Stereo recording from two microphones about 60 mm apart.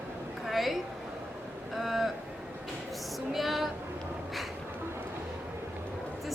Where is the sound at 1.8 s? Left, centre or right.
Centre.